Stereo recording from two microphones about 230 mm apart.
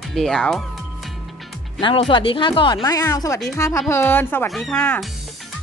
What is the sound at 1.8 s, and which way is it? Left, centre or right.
Speech, left.